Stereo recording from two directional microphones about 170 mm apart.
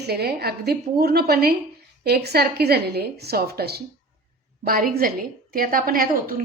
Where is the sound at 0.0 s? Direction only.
70° right (ahead or behind).